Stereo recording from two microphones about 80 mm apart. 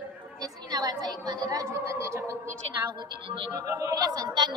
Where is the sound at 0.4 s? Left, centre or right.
Right.